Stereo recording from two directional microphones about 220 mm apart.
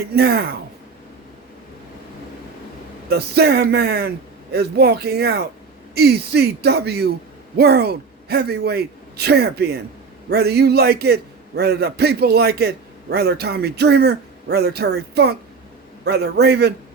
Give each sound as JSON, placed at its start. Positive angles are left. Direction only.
{"t": 0.1, "sound": "a man's voice", "side_deg": -45}
{"t": 3.1, "sound": "a man's voice", "side_deg": -45}